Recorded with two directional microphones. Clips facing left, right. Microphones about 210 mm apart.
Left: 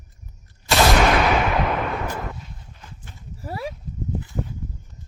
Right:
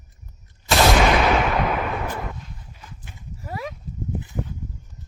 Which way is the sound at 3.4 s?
35° left (ahead or behind).